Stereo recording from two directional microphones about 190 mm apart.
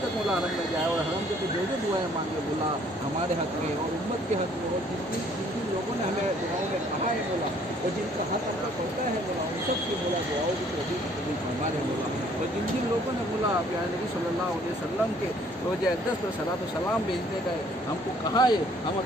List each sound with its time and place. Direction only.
18.3 s speech: 20° left (ahead or behind)